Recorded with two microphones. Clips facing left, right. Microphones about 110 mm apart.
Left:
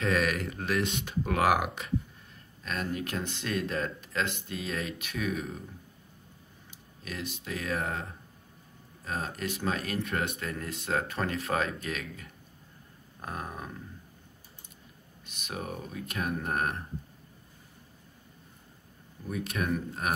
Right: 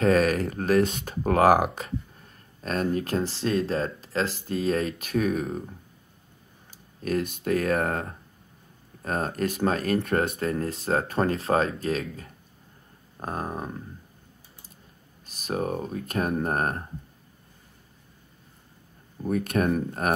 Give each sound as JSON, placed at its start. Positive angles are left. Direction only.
{"t": 0.0, "sound": "speech", "side_deg": -35}
{"t": 15.2, "sound": "speech", "side_deg": -40}
{"t": 19.2, "sound": "speech", "side_deg": -50}